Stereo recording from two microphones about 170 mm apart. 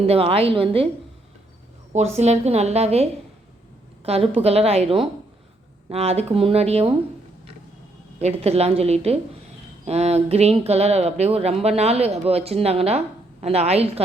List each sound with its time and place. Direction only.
0.0 s speech: 35° right (ahead or behind)
1.9 s a woman's voice: 40° right (ahead or behind)
8.2 s speech: 40° right (ahead or behind)